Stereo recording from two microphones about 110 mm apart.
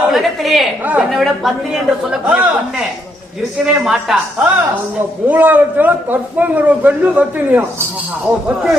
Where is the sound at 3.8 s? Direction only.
5° right (ahead or behind).